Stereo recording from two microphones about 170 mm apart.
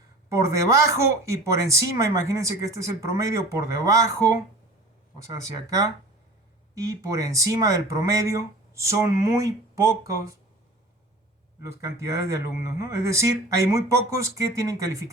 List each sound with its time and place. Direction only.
0.3 s speech: 15° right (ahead or behind)
5.6 s speech: 20° right (ahead or behind)
11.6 s speech: 20° right (ahead or behind)